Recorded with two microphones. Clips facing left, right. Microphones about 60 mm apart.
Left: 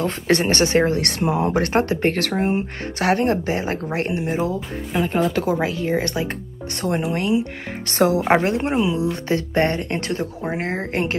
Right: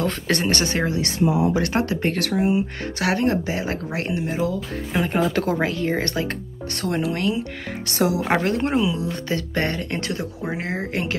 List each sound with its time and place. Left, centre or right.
0.3 s speech: left
0.9 s speech: left
1.6 s speech: left
3.0 s speech: left
4.9 s speech: centre
6.8 s speech: left